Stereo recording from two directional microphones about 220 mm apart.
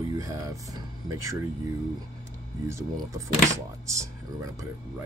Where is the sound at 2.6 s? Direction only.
15° right (ahead or behind).